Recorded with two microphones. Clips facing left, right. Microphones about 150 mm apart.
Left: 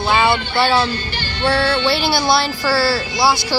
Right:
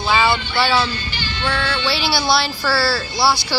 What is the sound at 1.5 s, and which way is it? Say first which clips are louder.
Music: left 6 dB; 30° left (ahead or behind).